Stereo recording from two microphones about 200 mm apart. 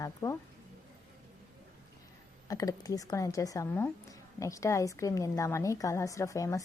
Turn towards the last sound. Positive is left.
turn(degrees=15)  # may be behind; listen again after turning